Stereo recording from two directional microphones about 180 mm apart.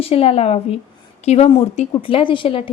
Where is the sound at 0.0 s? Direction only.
35° left (ahead or behind).